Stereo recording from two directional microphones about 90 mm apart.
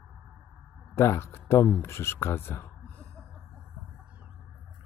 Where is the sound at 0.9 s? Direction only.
30° left (ahead or behind).